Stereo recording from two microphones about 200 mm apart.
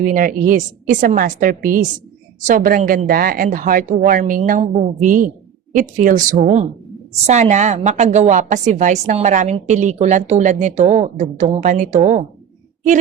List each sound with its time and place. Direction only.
0.0 s a woman's voice: 45° right (ahead or behind)